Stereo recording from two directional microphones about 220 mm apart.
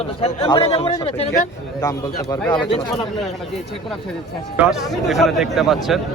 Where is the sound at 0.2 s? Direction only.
25° left (ahead or behind).